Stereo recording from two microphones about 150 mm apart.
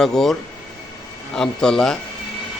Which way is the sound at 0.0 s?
Centre (ahead or behind).